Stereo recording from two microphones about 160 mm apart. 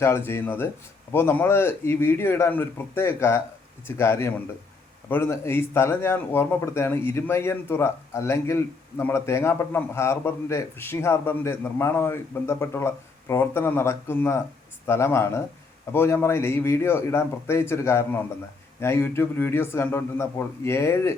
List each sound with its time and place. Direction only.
0.0 s speech: 15° left (ahead or behind)